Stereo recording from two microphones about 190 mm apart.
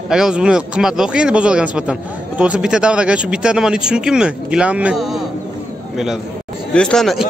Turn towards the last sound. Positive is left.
turn(degrees=0)  # may be behind; listen again after turning